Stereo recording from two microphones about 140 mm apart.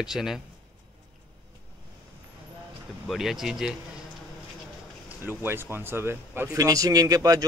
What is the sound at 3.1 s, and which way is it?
Speech, centre (ahead or behind).